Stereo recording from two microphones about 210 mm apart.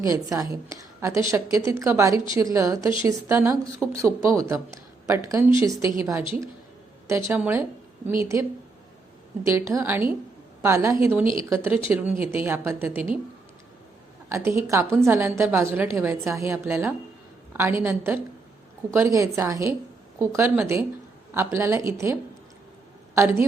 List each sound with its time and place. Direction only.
0.1 s speech: 15° right (ahead or behind)
7.1 s speech: 15° right (ahead or behind)
14.3 s speech: 10° right (ahead or behind)